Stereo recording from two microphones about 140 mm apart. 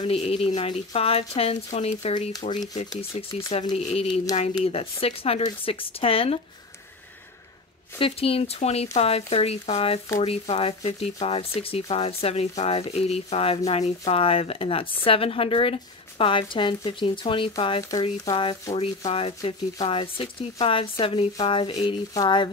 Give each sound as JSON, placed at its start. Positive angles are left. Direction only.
{"t": 0.0, "sound": "speech", "side_deg": 45}
{"t": 2.4, "sound": "a woman's voice", "side_deg": 35}
{"t": 3.2, "sound": "speech", "side_deg": 45}
{"t": 8.0, "sound": "a woman's voice", "side_deg": 45}
{"t": 21.7, "sound": "a woman's voice", "side_deg": 30}